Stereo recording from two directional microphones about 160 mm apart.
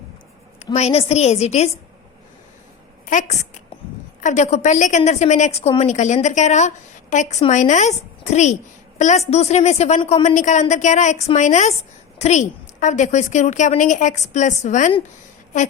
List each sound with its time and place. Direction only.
0.6 s a woman's voice: 40° left (ahead or behind)
3.1 s a woman's voice: 50° left (ahead or behind)
10.2 s a woman's voice: 50° left (ahead or behind)